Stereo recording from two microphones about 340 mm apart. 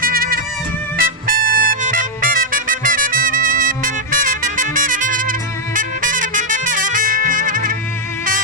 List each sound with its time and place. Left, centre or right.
0.0 s music: right